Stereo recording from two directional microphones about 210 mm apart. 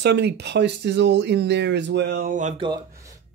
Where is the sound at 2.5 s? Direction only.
20° right (ahead or behind).